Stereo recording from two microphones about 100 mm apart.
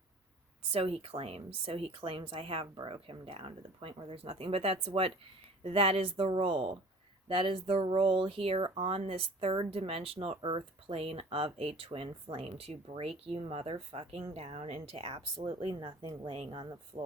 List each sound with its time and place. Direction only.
0.7 s a woman's voice: 70° right (ahead or behind)
11.9 s a woman's voice: 60° right (ahead or behind)